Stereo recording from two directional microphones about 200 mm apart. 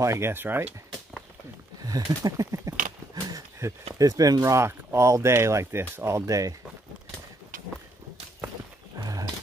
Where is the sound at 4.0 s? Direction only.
15° right (ahead or behind).